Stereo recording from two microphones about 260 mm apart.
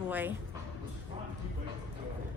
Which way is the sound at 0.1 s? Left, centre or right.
Centre.